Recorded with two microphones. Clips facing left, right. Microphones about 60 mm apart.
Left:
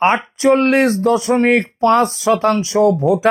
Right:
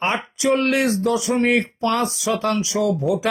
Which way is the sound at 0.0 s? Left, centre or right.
Left.